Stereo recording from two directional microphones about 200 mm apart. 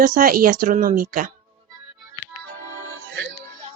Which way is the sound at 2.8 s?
70° right (ahead or behind).